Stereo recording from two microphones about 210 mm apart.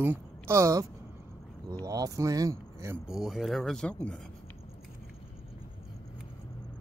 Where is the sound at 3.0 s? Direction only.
Centre (ahead or behind).